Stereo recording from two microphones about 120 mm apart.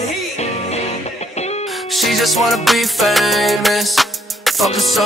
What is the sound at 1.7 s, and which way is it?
Music, centre (ahead or behind).